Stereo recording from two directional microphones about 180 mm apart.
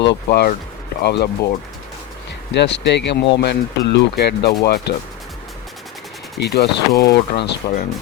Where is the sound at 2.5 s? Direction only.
75° left (ahead or behind).